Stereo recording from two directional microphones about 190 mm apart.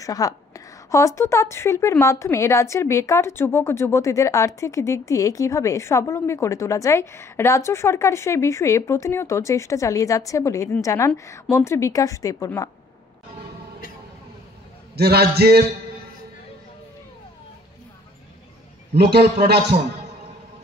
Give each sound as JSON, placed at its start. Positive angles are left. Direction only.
{"t": 0.0, "sound": "a woman's voice", "side_deg": 15}
{"t": 15.0, "sound": "a man's voice", "side_deg": -55}
{"t": 18.9, "sound": "a man's voice", "side_deg": -55}